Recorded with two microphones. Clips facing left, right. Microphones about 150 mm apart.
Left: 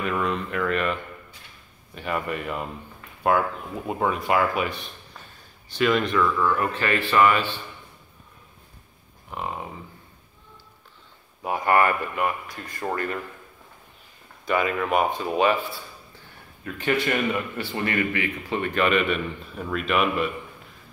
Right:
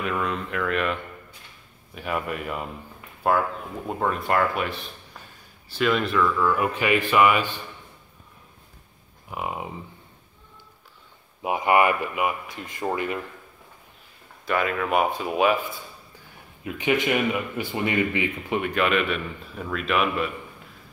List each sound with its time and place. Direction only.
0.0 s a man's voice: centre (ahead or behind)
2.0 s a man's voice: centre (ahead or behind)
9.3 s speech: 10° right (ahead or behind)
11.4 s speech: 15° right (ahead or behind)
14.4 s a man's voice: centre (ahead or behind)
16.6 s speech: 15° right (ahead or behind)
18.6 s a man's voice: centre (ahead or behind)